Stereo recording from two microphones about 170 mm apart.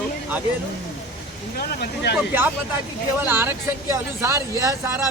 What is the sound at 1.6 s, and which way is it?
Speech, 70° left (ahead or behind).